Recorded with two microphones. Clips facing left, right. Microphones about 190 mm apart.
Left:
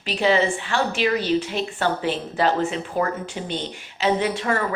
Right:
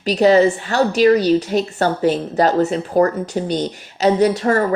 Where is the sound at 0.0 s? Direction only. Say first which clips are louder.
Right 8 dB; 40° right (ahead or behind).